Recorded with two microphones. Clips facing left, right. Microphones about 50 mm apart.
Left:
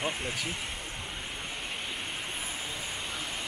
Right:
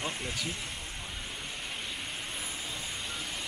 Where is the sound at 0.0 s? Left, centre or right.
Centre.